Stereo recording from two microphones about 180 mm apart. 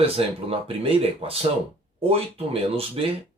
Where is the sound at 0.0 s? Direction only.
30° right (ahead or behind).